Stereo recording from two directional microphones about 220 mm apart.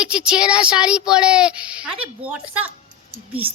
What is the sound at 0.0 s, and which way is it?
Speech, 5° right (ahead or behind).